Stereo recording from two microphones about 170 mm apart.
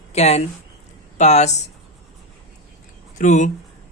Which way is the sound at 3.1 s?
45° left (ahead or behind).